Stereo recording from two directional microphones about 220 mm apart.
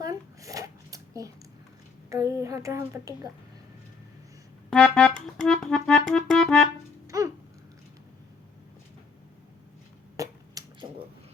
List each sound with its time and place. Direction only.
0.0 s zipper: 15° right (ahead or behind)
2.0 s speech: 15° right (ahead or behind)
4.7 s music: 5° left (ahead or behind)
7.1 s babbling: 15° right (ahead or behind)
10.2 s a sound: 15° right (ahead or behind)